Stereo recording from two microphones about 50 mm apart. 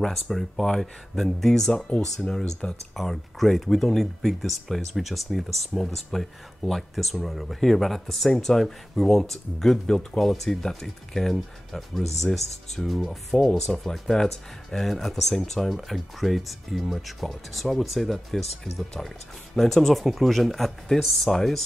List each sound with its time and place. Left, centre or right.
0.0 s speech: centre
3.0 s speech: centre